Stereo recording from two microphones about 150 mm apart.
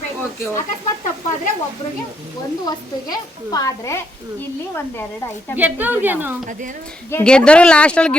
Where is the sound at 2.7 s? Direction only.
25° left (ahead or behind).